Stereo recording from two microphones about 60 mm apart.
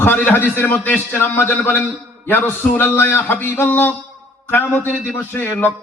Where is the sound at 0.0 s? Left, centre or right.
Left.